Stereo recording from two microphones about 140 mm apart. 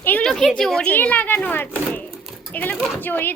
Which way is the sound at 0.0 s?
10° left (ahead or behind).